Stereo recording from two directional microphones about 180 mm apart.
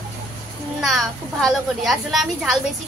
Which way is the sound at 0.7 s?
Centre (ahead or behind).